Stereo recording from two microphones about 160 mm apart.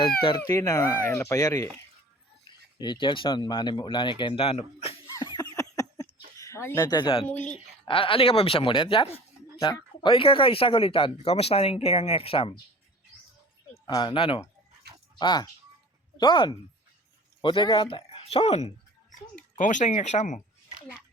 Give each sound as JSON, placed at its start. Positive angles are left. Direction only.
{"t": 0.4, "sound": "speech", "side_deg": 20}
{"t": 2.7, "sound": "speech", "side_deg": 30}
{"t": 5.2, "sound": "laughter", "side_deg": 30}
{"t": 5.5, "sound": "a sound", "side_deg": 20}
{"t": 6.3, "sound": "speech", "side_deg": 20}
{"t": 13.8, "sound": "speech", "side_deg": 30}